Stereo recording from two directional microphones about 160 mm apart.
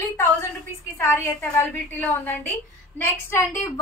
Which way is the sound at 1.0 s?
15° left (ahead or behind).